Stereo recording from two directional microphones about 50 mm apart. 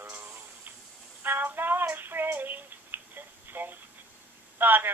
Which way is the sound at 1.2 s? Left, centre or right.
Right.